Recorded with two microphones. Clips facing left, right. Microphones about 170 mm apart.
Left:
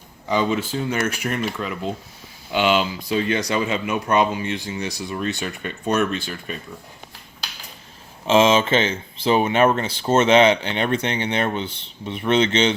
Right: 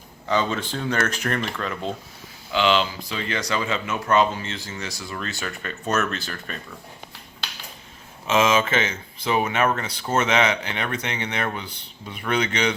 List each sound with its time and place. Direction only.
0.3 s speech: 10° left (ahead or behind)
8.3 s speech: 30° left (ahead or behind)